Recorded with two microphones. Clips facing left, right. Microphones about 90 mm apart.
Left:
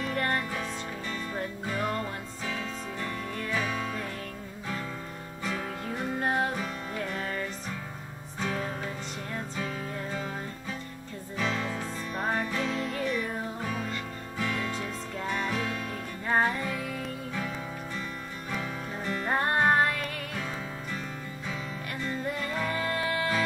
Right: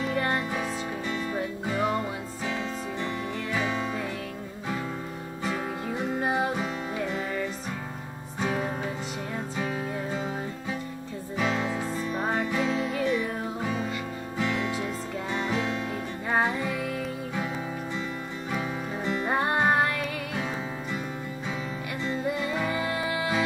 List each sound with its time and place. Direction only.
0.0 s music: 10° right (ahead or behind)
3.5 s music: 20° right (ahead or behind)
5.5 s music: 5° right (ahead or behind)
6.5 s music: 20° right (ahead or behind)
8.4 s music: 20° right (ahead or behind)
12.1 s music: centre (ahead or behind)
12.4 s music: 15° right (ahead or behind)
12.6 s music: 5° right (ahead or behind)
13.7 s music: 15° right (ahead or behind)
16.3 s music: 10° right (ahead or behind)
18.5 s music: 20° right (ahead or behind)
19.2 s music: 10° right (ahead or behind)
22.0 s music: 10° right (ahead or behind)